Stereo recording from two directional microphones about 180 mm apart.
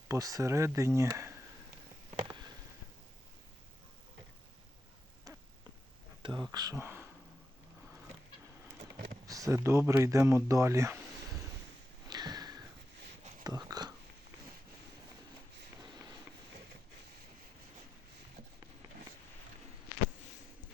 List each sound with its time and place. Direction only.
0.1 s speech: 20° right (ahead or behind)
2.0 s a sound: 30° right (ahead or behind)
6.2 s speech: 25° right (ahead or behind)
9.2 s speech: 20° right (ahead or behind)
12.0 s sniff: 20° right (ahead or behind)
13.4 s a sound: 20° right (ahead or behind)